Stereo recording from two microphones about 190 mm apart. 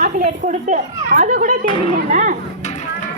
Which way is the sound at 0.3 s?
40° right (ahead or behind).